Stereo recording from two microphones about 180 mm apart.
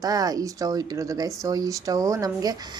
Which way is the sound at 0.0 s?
20° right (ahead or behind).